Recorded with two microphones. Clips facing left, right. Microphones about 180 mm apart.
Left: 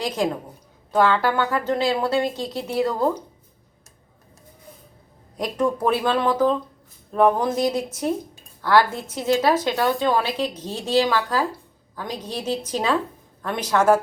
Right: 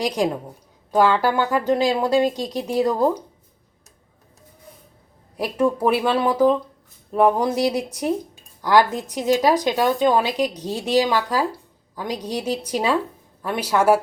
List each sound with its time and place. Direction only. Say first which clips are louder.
0.0 s speech: right 2 dB; 15° right (ahead or behind)
5.4 s speech: right 2 dB; 10° right (ahead or behind)